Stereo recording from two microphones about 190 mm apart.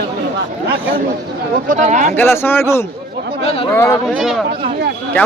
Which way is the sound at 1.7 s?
40° right (ahead or behind).